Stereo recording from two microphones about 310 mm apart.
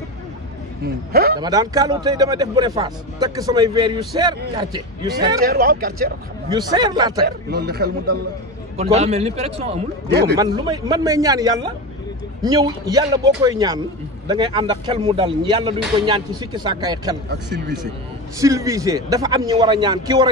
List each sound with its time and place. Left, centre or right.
1.1 s a man's voice: right
1.4 s speech: centre
5.4 s a man's voice: right
6.5 s speech: centre
7.2 s a man's voice: right
8.7 s a man's voice: centre
10.0 s a man's voice: right
10.3 s speech: centre
17.3 s a man's voice: right
18.4 s speech: centre